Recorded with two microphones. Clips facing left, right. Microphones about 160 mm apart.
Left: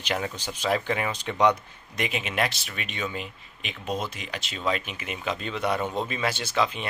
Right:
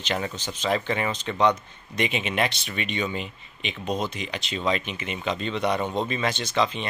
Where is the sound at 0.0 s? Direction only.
5° left (ahead or behind).